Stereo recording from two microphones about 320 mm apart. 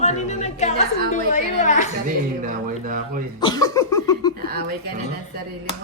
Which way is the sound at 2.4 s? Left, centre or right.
Right.